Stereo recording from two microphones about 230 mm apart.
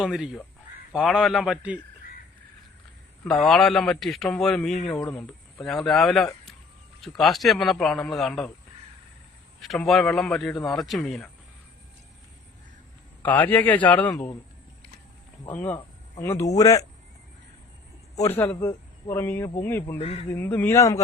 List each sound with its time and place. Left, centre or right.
0.0 s a man's voice: centre
3.2 s a man's voice: centre
9.6 s a man's voice: centre
13.2 s speech: centre
15.4 s speech: centre
18.2 s speech: centre
20.0 s speech: left
20.3 s speech: centre